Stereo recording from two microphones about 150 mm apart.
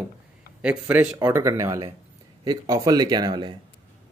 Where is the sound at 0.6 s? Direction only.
10° right (ahead or behind).